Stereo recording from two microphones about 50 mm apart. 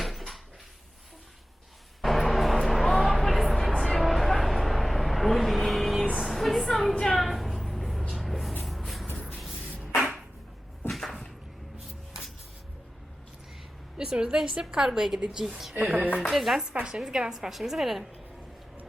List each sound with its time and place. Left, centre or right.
0.0 s cupboard open or close: centre
2.0 s music: centre
3.8 s vehicle: centre
6.1 s a sound: centre
8.6 s shuffle: centre
10.8 s cupboard open or close: centre
14.0 s a woman's voice: centre
16.3 s a woman's voice: centre
16.8 s a woman's voice: centre
17.3 s a woman's voice: centre